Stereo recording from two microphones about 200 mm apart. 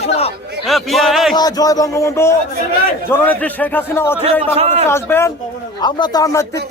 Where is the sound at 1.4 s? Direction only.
20° left (ahead or behind).